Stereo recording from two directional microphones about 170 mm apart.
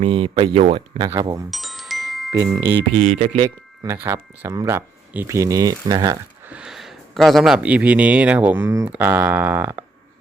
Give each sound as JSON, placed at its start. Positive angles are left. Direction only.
{"t": 0.0, "sound": "speech", "side_deg": -30}
{"t": 1.5, "sound": "glockenspiel", "side_deg": 0}
{"t": 2.3, "sound": "speech", "side_deg": -20}
{"t": 2.9, "sound": "speech", "side_deg": -40}
{"t": 3.9, "sound": "speech", "side_deg": -15}
{"t": 6.5, "sound": "speech", "side_deg": -5}